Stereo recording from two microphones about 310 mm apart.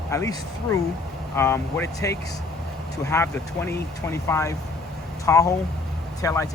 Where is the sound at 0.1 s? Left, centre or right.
Centre.